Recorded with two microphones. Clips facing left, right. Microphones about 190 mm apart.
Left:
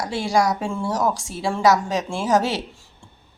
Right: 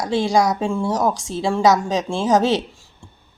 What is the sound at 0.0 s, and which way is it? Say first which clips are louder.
A woman's voice: right 3 dB; 20° right (ahead or behind).